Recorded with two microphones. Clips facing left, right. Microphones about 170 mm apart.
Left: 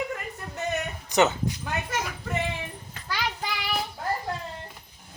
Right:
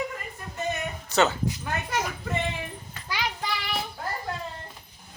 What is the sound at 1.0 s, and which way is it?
Speech, 15° left (ahead or behind).